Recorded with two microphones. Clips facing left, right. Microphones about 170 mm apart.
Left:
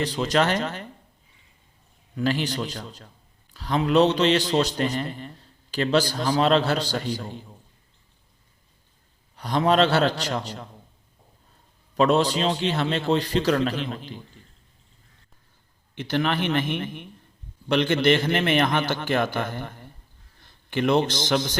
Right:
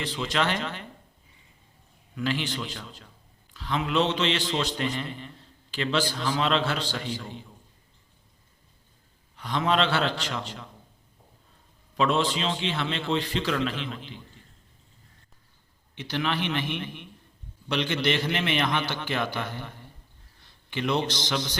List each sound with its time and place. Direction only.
0.0 s a man's voice: 40° left (ahead or behind)
2.1 s a man's voice: 40° left (ahead or behind)
9.3 s a man's voice: 40° left (ahead or behind)
11.9 s a man's voice: 40° left (ahead or behind)
16.0 s a man's voice: 50° left (ahead or behind)